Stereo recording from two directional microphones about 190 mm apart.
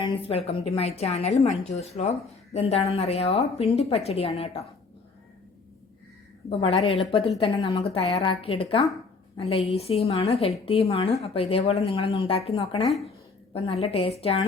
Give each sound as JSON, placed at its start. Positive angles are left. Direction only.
{"t": 0.0, "sound": "a woman's voice", "side_deg": 30}
{"t": 6.5, "sound": "a woman's voice", "side_deg": 30}